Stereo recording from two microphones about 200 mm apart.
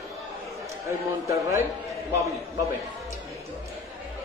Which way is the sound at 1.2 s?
15° right (ahead or behind).